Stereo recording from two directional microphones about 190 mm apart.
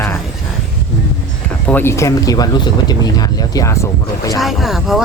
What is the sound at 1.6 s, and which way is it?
Speech, 10° left (ahead or behind).